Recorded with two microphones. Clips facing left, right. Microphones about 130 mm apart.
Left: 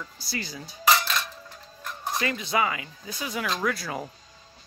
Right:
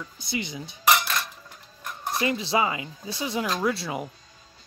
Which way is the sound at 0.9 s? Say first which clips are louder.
Even; 10° right (ahead or behind).